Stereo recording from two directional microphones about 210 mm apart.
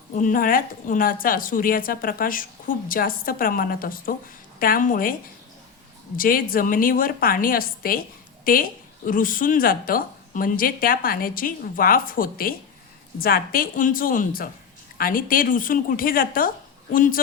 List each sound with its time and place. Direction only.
0.1 s a woman's voice: 40° left (ahead or behind)
6.1 s a woman's voice: 40° left (ahead or behind)